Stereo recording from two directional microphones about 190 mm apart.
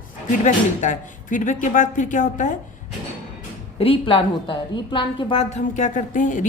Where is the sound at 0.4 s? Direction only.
40° left (ahead or behind).